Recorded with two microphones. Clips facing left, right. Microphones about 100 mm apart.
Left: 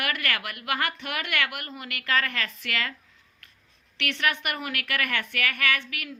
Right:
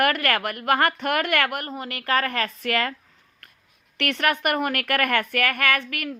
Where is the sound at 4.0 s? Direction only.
45° right (ahead or behind).